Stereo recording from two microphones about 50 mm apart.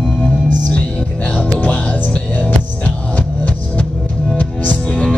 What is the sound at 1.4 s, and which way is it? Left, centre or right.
Music, left.